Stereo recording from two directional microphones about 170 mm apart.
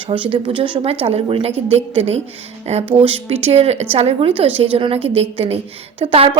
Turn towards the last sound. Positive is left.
turn(degrees=-35)  # may be behind; listen again after turning